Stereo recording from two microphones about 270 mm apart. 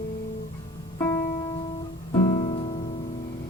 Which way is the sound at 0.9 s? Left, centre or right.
Centre.